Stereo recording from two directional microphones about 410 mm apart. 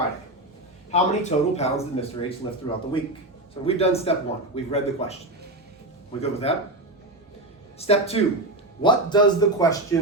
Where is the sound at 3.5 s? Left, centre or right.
Centre.